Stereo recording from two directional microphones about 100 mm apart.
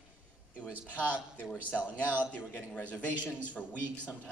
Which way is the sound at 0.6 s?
15° left (ahead or behind).